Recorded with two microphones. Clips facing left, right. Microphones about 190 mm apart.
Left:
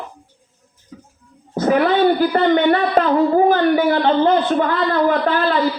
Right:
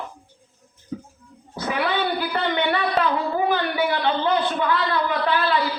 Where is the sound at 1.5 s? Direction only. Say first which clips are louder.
Left 9 dB; 45° left (ahead or behind).